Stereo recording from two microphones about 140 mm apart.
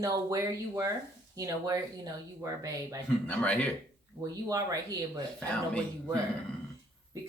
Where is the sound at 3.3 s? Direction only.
10° left (ahead or behind).